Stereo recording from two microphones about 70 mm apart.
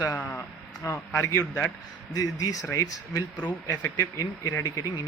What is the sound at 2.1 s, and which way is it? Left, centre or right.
Speech, left.